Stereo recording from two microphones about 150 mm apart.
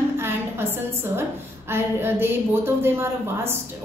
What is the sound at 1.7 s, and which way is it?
Speech, 15° right (ahead or behind).